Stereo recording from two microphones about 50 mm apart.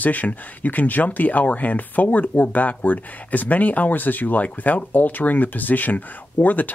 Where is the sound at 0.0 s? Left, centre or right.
Left.